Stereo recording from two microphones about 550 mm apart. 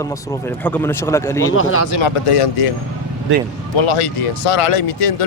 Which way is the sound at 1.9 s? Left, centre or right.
Left.